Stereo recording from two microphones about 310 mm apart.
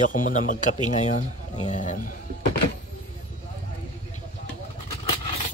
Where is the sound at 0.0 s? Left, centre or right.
Left.